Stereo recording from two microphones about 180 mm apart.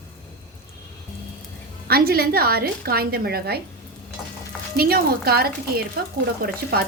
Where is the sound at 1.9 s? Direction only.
55° right (ahead or behind).